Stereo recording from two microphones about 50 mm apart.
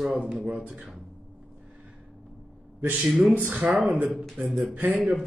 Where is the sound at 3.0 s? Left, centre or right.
Centre.